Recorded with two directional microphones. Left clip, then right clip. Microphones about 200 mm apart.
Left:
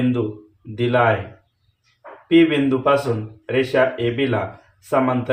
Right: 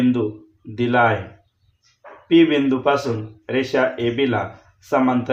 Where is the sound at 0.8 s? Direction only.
35° right (ahead or behind).